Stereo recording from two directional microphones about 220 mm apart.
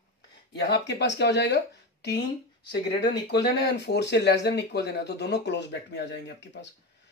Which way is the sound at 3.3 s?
50° left (ahead or behind).